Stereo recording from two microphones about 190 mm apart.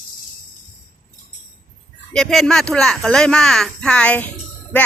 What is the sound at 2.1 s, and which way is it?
Speech, centre (ahead or behind).